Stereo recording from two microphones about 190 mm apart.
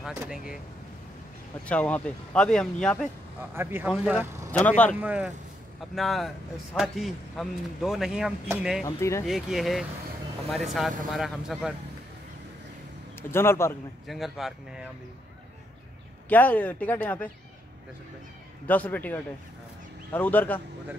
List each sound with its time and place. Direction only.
0.0 s speech: 10° right (ahead or behind)
1.7 s speech: 5° left (ahead or behind)
3.5 s speech: 10° right (ahead or behind)
4.5 s speech: 10° left (ahead or behind)
5.0 s speech: 5° right (ahead or behind)
8.8 s speech: 15° left (ahead or behind)
9.2 s speech: centre (ahead or behind)
13.3 s speech: 15° left (ahead or behind)
14.0 s speech: centre (ahead or behind)
16.3 s speech: 10° left (ahead or behind)
18.7 s speech: 10° left (ahead or behind)